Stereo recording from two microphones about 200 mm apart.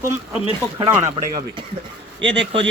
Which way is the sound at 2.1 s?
60° right (ahead or behind).